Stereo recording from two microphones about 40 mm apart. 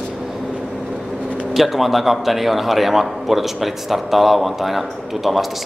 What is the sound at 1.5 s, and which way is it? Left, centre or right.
A man's voice, centre.